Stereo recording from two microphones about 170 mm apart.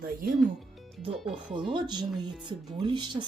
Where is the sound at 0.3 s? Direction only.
Centre (ahead or behind).